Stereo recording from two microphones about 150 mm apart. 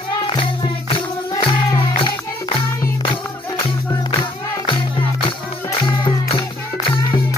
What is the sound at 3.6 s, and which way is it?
Music, 35° left (ahead or behind).